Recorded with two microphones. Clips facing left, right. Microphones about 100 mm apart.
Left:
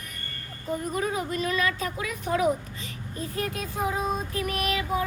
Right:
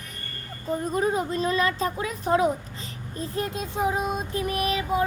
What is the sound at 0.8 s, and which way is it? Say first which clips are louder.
A woman's voice: right 5 dB; 30° right (ahead or behind).